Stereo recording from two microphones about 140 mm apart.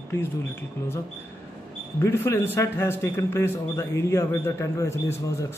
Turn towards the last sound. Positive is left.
turn(degrees=20)  # may be behind; listen again after turning